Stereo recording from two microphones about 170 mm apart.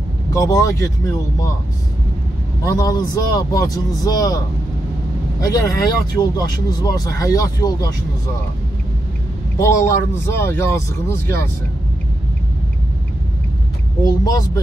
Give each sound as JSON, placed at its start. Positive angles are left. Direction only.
{"t": 0.3, "sound": "speech", "side_deg": 20}
{"t": 2.6, "sound": "speech", "side_deg": 20}
{"t": 5.4, "sound": "speech", "side_deg": 20}
{"t": 9.6, "sound": "speech", "side_deg": 15}
{"t": 14.0, "sound": "speech", "side_deg": 20}